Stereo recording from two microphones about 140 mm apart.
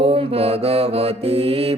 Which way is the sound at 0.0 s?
45° right (ahead or behind).